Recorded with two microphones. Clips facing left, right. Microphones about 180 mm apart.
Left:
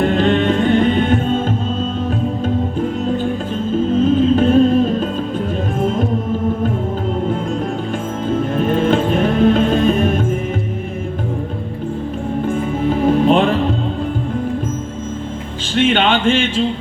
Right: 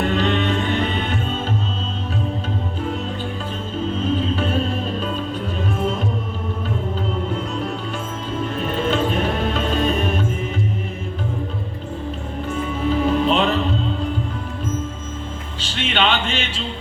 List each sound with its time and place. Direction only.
0.0 s music: 50° left (ahead or behind)
3.9 s music: 50° left (ahead or behind)
8.3 s music: 50° left (ahead or behind)
12.5 s music: 50° left (ahead or behind)
15.6 s music: 50° left (ahead or behind)